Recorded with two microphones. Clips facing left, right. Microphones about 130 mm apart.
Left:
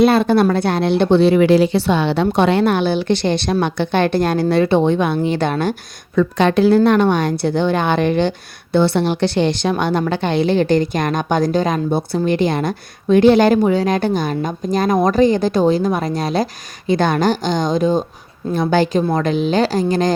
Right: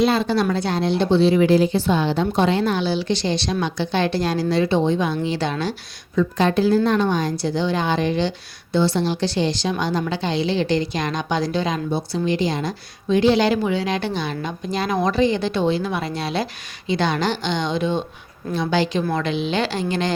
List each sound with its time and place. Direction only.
0.0 s speech: 60° left (ahead or behind)
6.1 s a woman's voice: 70° left (ahead or behind); by 20.1 s 40° left (ahead or behind)